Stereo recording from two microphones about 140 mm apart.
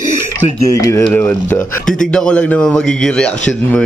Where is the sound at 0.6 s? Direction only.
25° left (ahead or behind).